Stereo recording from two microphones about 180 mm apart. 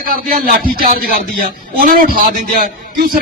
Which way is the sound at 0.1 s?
50° right (ahead or behind).